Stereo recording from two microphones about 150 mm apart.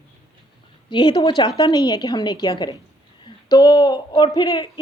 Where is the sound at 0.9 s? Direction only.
30° left (ahead or behind).